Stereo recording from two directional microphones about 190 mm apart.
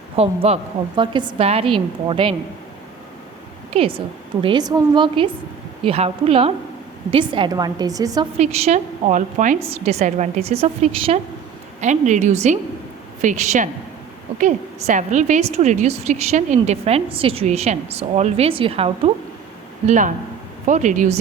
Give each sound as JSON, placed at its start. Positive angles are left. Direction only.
{"t": 0.2, "sound": "a woman's voice", "side_deg": -35}
{"t": 3.7, "sound": "a woman's voice", "side_deg": -30}
{"t": 8.4, "sound": "a woman's voice", "side_deg": -35}
{"t": 19.9, "sound": "a woman's voice", "side_deg": -40}